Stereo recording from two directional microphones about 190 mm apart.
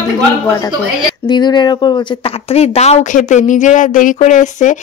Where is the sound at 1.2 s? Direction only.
25° left (ahead or behind).